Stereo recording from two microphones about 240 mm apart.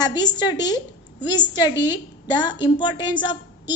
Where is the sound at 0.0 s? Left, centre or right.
Centre.